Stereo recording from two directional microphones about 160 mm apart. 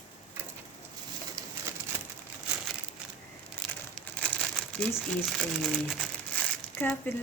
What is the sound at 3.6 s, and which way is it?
Crumpling, centre (ahead or behind).